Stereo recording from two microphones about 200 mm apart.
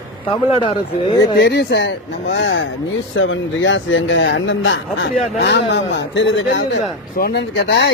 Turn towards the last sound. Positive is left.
turn(degrees=60)  # may be behind; listen again after turning